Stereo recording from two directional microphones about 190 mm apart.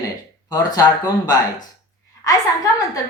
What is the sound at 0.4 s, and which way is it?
Speech, 20° left (ahead or behind).